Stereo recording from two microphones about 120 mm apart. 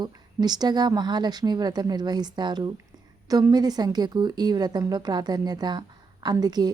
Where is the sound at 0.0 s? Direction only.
35° right (ahead or behind).